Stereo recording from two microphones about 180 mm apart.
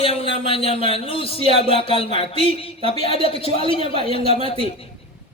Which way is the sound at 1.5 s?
30° left (ahead or behind).